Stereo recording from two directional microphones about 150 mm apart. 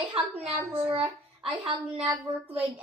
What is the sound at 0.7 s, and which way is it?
Speech, 40° right (ahead or behind).